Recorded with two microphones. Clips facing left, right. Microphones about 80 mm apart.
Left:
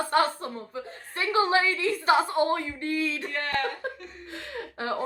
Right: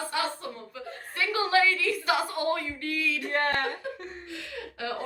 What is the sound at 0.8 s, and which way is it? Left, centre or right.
A woman's voice, left.